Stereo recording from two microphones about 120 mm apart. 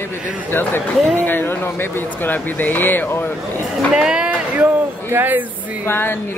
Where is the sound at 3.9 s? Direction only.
5° right (ahead or behind).